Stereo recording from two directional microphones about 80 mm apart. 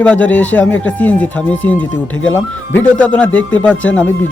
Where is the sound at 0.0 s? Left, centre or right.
Centre.